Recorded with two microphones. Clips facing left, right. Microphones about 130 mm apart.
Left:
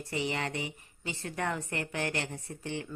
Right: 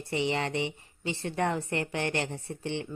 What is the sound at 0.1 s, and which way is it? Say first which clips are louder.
A woman's voice: right 4 dB; 25° right (ahead or behind).